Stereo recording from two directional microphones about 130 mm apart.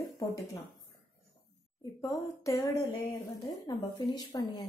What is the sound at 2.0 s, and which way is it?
Speech, 20° left (ahead or behind).